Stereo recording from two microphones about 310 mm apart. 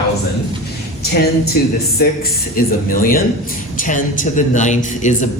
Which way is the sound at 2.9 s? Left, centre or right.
Left.